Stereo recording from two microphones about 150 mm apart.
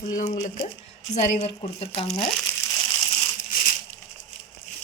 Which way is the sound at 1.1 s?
45° left (ahead or behind).